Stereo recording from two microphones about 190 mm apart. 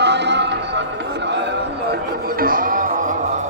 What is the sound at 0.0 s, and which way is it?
Music, 65° right (ahead or behind).